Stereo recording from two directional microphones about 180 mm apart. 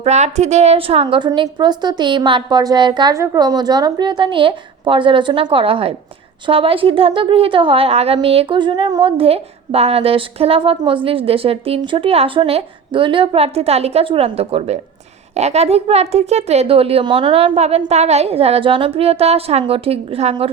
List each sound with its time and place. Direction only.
0.0 s a woman's voice: 40° right (ahead or behind)